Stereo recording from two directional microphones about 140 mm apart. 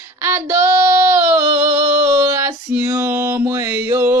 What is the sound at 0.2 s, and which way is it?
Child singing, 15° right (ahead or behind).